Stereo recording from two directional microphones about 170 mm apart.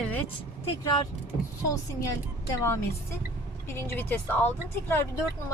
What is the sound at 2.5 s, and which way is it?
Speech, 15° left (ahead or behind).